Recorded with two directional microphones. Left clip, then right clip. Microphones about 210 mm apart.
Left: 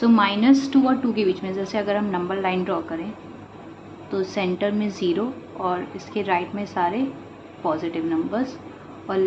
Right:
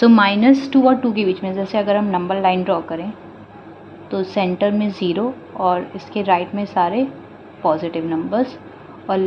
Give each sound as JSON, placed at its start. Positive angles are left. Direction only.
{"t": 0.0, "sound": "a woman's voice", "side_deg": -45}
{"t": 4.1, "sound": "a woman's voice", "side_deg": -25}